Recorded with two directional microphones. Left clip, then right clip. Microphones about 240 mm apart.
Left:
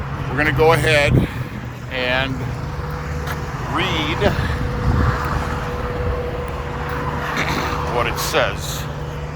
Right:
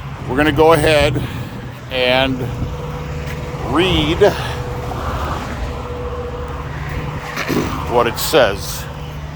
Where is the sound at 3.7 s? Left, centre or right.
Right.